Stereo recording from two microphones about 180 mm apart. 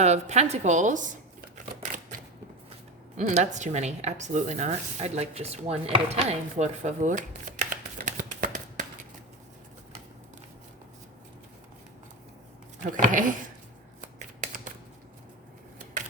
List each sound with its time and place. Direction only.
0.0 s speech: 40° right (ahead or behind)
1.8 s shuffling cards: 45° right (ahead or behind)
3.2 s speech: 40° right (ahead or behind)
6.6 s shuffling cards: 40° right (ahead or behind)
12.8 s speech: 45° right (ahead or behind)
14.0 s shuffling cards: 45° right (ahead or behind)